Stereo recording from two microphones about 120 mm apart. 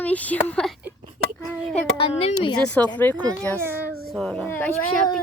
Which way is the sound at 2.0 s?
50° left (ahead or behind).